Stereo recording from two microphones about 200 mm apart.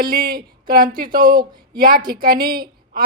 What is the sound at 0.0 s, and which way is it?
Speech, 45° right (ahead or behind).